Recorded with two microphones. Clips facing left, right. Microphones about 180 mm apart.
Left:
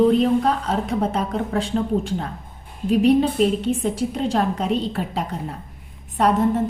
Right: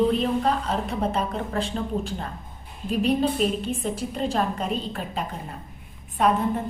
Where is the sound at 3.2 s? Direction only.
80° left.